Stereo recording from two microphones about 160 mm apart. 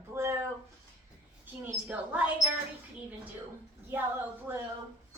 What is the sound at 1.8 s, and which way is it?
Speech, 10° right (ahead or behind).